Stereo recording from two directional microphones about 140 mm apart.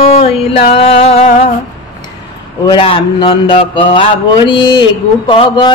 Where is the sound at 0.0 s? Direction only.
45° left (ahead or behind).